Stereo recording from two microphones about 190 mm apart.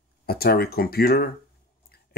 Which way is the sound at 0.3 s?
55° left (ahead or behind).